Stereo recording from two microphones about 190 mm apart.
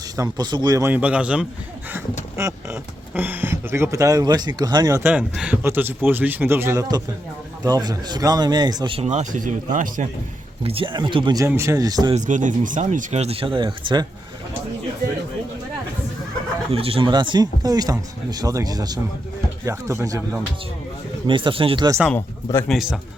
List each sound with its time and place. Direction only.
0.2 s speech: 20° right (ahead or behind); by 10.1 s 45° right (ahead or behind)
10.6 s speech: 30° right (ahead or behind)
12.1 s speech: 40° right (ahead or behind); by 14.1 s 25° right (ahead or behind)
16.7 s speech: 30° right (ahead or behind)
21.2 s speech: 25° right (ahead or behind)
21.9 s speech: centre (ahead or behind)